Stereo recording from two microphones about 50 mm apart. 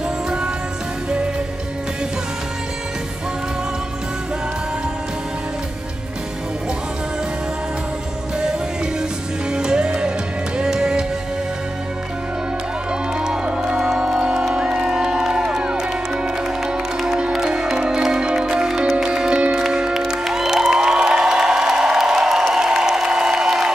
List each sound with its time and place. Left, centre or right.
9.5 s music: centre
13.2 s music: centre